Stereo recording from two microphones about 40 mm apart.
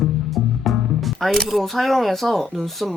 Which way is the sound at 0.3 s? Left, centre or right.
Centre.